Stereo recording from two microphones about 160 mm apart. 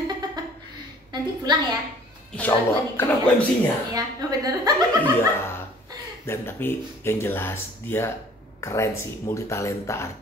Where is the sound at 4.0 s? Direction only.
25° right (ahead or behind).